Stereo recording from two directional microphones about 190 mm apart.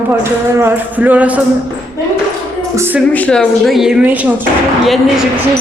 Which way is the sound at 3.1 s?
5° left (ahead or behind).